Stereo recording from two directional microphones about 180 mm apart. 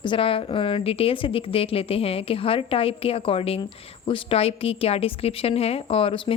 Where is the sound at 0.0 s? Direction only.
30° left (ahead or behind).